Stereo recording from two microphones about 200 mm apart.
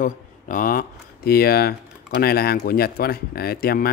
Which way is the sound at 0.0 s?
40° left (ahead or behind).